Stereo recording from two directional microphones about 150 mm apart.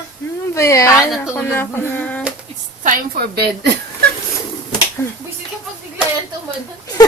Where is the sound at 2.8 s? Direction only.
75° right (ahead or behind).